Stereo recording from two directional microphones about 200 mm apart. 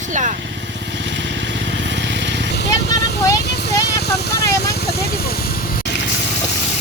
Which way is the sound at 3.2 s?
15° left (ahead or behind).